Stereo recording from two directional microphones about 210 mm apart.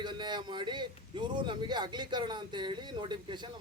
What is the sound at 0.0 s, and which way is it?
A man's voice, 20° right (ahead or behind).